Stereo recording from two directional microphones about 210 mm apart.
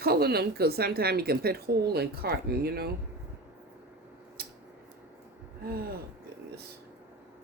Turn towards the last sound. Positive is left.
turn(degrees=-45)  # may be behind; listen again after turning